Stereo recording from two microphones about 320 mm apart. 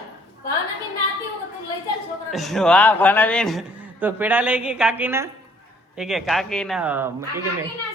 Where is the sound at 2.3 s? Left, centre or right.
Centre.